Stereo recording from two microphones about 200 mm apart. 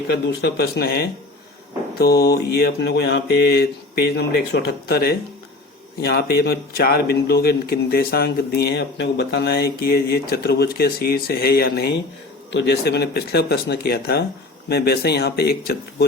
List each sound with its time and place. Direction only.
0.1 s a man's voice: 55° left (ahead or behind)